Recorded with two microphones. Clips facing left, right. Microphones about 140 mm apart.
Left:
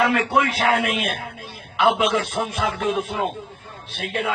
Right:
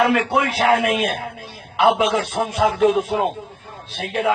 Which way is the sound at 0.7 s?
35° right (ahead or behind).